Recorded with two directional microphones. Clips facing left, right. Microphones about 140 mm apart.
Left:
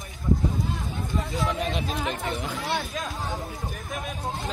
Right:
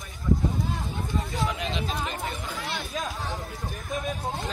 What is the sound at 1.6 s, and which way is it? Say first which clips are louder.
Speech: left 2 dB; 50° left (ahead or behind).